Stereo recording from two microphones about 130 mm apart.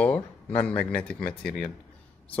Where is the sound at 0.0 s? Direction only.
10° left (ahead or behind).